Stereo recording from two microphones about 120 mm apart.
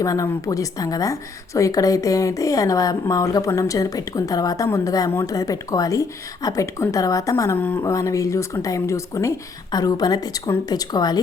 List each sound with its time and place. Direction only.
0.0 s a woman's voice: 30° left (ahead or behind)